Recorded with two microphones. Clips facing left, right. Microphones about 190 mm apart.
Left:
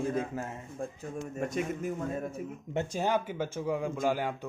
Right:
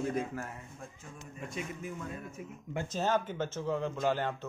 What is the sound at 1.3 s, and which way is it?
A man's voice, 45° left (ahead or behind).